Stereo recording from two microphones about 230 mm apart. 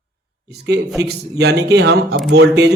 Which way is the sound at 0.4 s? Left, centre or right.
Right.